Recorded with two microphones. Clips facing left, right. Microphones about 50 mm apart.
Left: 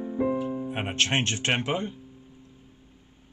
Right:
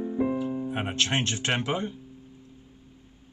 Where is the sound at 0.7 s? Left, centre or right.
Left.